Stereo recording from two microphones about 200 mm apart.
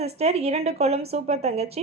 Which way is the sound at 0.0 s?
30° right (ahead or behind).